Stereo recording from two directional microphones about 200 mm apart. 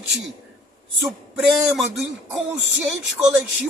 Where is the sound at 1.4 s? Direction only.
Centre (ahead or behind).